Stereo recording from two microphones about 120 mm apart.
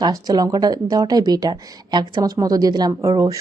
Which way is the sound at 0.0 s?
35° right (ahead or behind).